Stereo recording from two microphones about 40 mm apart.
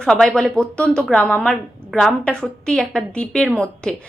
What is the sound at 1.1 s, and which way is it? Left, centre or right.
Speech, left.